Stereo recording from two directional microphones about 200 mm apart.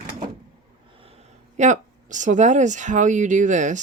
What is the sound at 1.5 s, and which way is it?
Speech, 35° right (ahead or behind).